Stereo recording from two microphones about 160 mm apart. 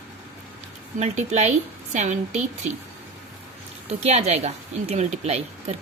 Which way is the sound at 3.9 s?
45° right (ahead or behind).